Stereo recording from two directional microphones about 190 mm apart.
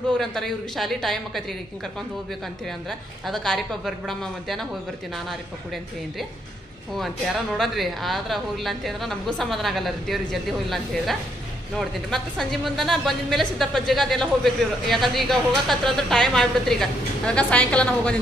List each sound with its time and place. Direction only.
0.2 s a woman's voice: centre (ahead or behind)
2.6 s a woman's voice: centre (ahead or behind)
7.0 s a woman's voice: centre (ahead or behind)